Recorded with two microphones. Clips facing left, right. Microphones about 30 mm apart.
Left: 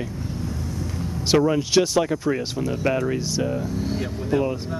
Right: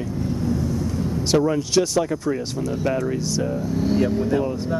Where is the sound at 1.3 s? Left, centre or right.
Centre.